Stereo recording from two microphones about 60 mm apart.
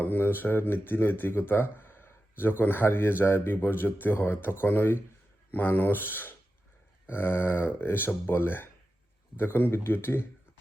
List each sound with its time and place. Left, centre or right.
0.0 s speech: left